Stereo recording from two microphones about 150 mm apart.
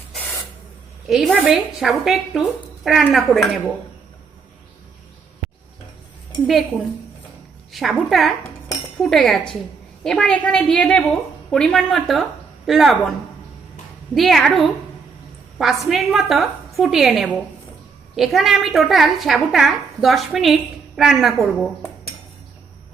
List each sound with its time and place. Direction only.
1.0 s a woman's voice: centre (ahead or behind)
6.5 s a woman's voice: centre (ahead or behind)
14.2 s a woman's voice: centre (ahead or behind)